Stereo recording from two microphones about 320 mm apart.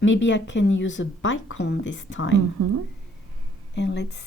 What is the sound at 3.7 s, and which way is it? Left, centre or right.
Speech, left.